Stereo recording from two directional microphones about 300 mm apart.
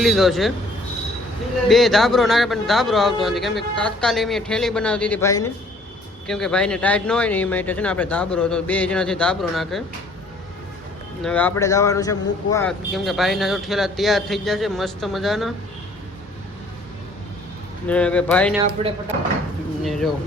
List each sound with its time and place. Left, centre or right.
0.0 s a man's voice: centre
1.6 s a man's voice: centre
11.2 s speech: centre
12.9 s a man's voice: centre
17.8 s a man's voice: centre
18.6 s speech: centre
19.8 s speech: centre